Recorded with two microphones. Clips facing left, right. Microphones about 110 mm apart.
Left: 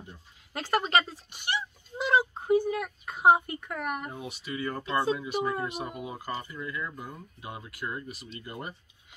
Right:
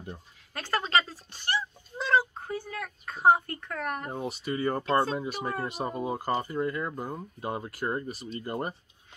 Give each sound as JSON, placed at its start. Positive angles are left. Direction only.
{"t": 0.5, "sound": "speech", "side_deg": 20}
{"t": 4.1, "sound": "speech", "side_deg": -40}